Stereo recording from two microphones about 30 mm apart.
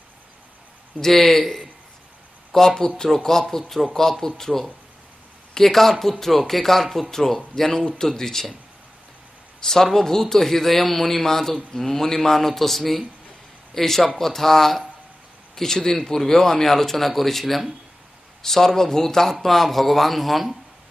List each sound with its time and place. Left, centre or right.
1.0 s a man's voice: centre
9.6 s a man's voice: centre